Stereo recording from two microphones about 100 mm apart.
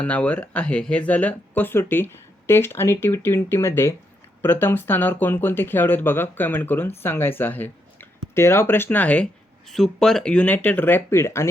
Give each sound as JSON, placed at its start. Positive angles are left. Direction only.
{"t": 0.0, "sound": "speech", "side_deg": 15}
{"t": 9.7, "sound": "speech", "side_deg": 5}